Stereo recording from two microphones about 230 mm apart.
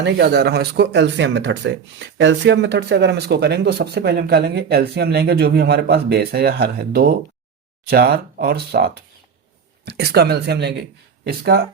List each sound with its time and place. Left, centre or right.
0.0 s speech: right